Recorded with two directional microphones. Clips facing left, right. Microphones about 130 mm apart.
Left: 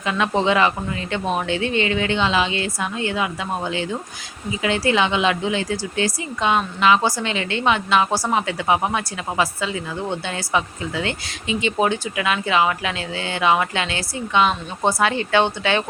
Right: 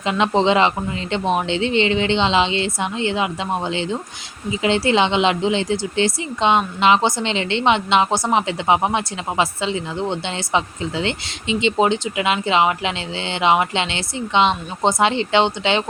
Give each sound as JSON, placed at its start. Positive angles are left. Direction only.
{"t": 0.0, "sound": "speech", "side_deg": -25}